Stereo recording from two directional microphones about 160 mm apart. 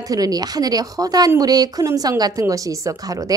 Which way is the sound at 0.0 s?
25° right (ahead or behind).